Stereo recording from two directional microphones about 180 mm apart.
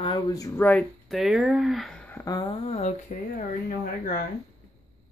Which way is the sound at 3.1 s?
50° left (ahead or behind).